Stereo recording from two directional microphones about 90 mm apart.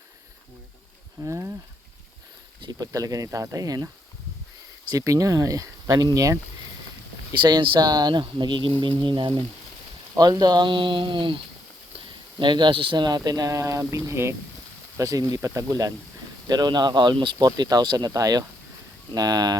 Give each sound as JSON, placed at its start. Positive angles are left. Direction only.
{"t": 1.2, "sound": "speech", "side_deg": -35}
{"t": 2.7, "sound": "speech", "side_deg": -40}
{"t": 4.9, "sound": "speech", "side_deg": -40}
{"t": 7.4, "sound": "speech", "side_deg": -60}
{"t": 8.2, "sound": "speech", "side_deg": -60}
{"t": 10.2, "sound": "speech", "side_deg": -50}
{"t": 16.5, "sound": "speech", "side_deg": -50}